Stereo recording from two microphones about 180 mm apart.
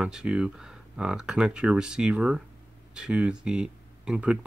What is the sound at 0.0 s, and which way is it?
Speech, 5° right (ahead or behind).